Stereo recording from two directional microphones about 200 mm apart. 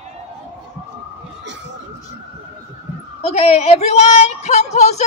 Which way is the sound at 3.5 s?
35° left (ahead or behind).